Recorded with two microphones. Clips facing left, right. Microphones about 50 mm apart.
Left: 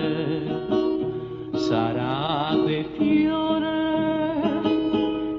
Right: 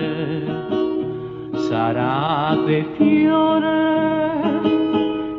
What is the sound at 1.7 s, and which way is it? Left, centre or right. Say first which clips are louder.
Music: right 5 dB; right.